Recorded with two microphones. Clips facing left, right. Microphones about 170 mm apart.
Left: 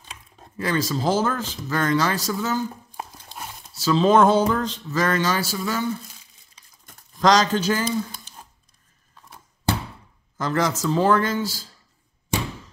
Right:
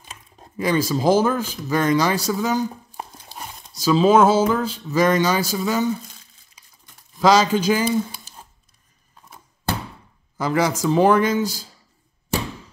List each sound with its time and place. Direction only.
0.0 s speech: 10° right (ahead or behind)
3.3 s a sound: centre (ahead or behind)
3.7 s speech: 10° right (ahead or behind)
7.2 s speech: 5° right (ahead or behind)
10.3 s speech: 10° right (ahead or behind)